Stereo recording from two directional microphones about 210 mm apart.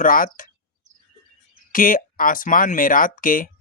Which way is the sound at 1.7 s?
40° left (ahead or behind).